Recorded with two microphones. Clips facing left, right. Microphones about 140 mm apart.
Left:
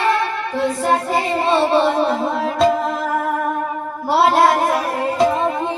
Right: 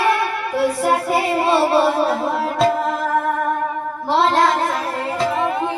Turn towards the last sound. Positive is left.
turn(degrees=10)  # may be behind; listen again after turning